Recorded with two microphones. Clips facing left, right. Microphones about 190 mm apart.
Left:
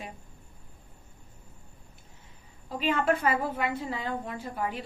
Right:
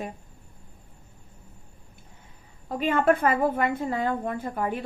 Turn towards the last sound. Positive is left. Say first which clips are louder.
# right 4 dB
turn(degrees=-50)  # may be behind; listen again after turning